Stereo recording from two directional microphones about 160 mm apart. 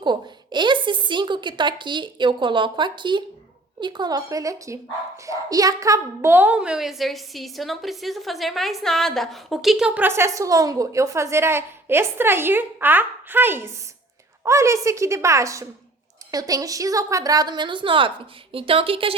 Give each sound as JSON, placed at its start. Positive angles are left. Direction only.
{"t": 0.0, "sound": "a woman's voice", "side_deg": -30}